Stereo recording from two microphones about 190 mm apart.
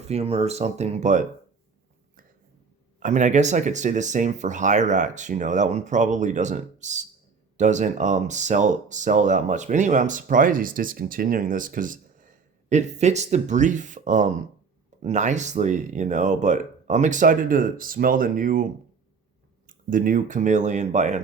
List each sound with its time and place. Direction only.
0.1 s speech: 30° right (ahead or behind)
3.0 s speech: 40° right (ahead or behind)
19.6 s speech: 45° right (ahead or behind)